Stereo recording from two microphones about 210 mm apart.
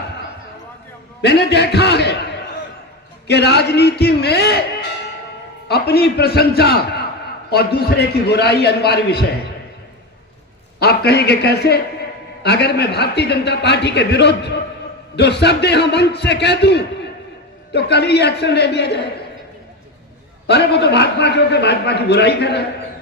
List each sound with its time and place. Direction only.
1.2 s a man's voice: 50° left (ahead or behind)
3.2 s a man's voice: 50° left (ahead or behind)
10.8 s a man's voice: 50° left (ahead or behind)
20.5 s a man's voice: 50° left (ahead or behind)